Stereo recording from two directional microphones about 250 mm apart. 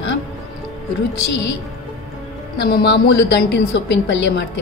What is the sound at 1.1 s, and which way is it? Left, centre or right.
Speech, left.